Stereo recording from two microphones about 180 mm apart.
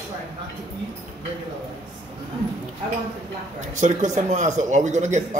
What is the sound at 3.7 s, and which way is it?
Speech, 40° right (ahead or behind).